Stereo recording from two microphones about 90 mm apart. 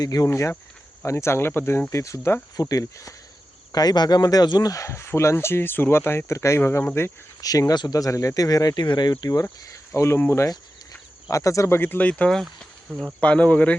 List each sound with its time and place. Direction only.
0.0 s speech: 45° left (ahead or behind)
0.3 s speech: 30° left (ahead or behind)
2.6 s speech: 40° left (ahead or behind)
7.4 s speech: 45° left (ahead or behind); by 13.7 s 15° left (ahead or behind)